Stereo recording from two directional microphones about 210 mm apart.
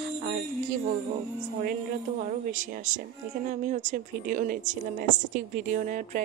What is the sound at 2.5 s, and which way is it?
A woman's voice, 40° right (ahead or behind).